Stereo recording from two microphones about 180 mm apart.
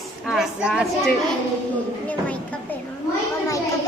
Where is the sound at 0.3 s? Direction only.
Centre (ahead or behind).